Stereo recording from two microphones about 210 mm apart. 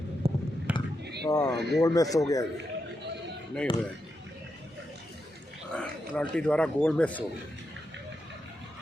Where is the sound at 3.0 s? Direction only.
55° right (ahead or behind).